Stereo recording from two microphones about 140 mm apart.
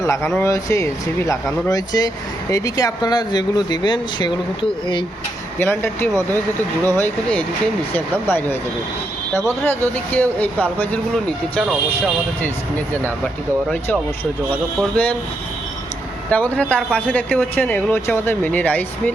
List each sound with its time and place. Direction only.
0.0 s speech: 20° left (ahead or behind)
5.5 s speech: 15° left (ahead or behind)
9.6 s speech: 10° left (ahead or behind)
12.4 s speech: 15° left (ahead or behind)
14.5 s speech: 10° left (ahead or behind)
16.3 s speech: 10° left (ahead or behind)